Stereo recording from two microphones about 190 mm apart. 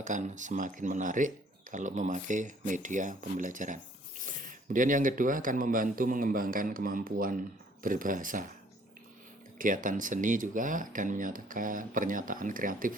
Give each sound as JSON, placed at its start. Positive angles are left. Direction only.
{"t": 0.0, "sound": "speech", "side_deg": -40}
{"t": 9.6, "sound": "speech", "side_deg": -45}